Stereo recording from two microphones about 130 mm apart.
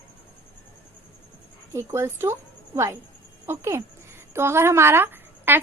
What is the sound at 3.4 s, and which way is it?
A woman's voice, 20° right (ahead or behind).